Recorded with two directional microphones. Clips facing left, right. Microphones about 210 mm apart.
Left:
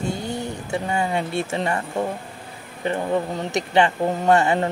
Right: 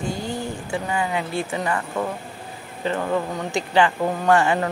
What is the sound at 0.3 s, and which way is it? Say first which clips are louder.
Speech: left 1 dB; 25° left (ahead or behind).